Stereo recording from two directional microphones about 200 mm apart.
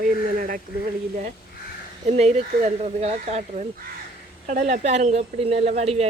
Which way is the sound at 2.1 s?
35° right (ahead or behind).